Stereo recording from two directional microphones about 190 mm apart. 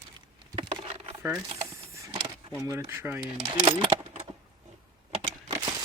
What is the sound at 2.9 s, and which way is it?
Speech, 10° right (ahead or behind).